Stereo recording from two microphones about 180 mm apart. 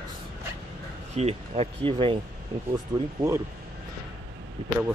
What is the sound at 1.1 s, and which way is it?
Speech, 35° right (ahead or behind).